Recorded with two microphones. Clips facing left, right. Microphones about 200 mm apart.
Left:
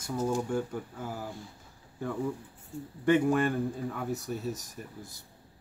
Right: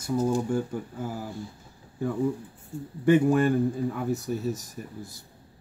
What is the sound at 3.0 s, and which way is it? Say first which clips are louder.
Speech: right 4 dB; 5° right (ahead or behind).